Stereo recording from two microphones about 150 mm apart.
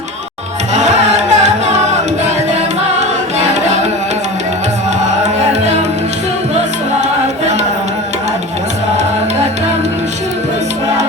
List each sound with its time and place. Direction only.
0.7 s music: 50° right (ahead or behind)
3.0 s music: 50° right (ahead or behind)
5.0 s music: 50° right (ahead or behind)